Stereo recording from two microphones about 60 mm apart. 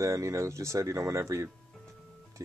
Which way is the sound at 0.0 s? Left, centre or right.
Right.